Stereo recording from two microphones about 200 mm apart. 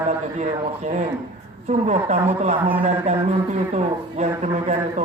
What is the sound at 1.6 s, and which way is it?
Speech, 35° right (ahead or behind).